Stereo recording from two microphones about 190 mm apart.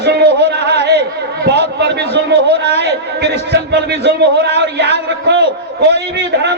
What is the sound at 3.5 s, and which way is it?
Music, 60° right (ahead or behind).